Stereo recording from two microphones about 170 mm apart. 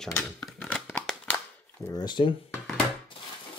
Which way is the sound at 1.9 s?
25° left (ahead or behind).